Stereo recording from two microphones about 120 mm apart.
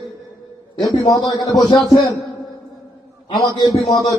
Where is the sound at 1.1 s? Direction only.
35° left (ahead or behind).